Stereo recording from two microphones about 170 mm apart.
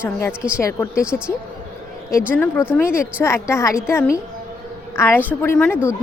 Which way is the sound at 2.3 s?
10° left (ahead or behind).